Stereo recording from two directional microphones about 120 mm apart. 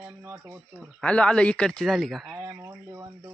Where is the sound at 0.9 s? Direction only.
10° left (ahead or behind).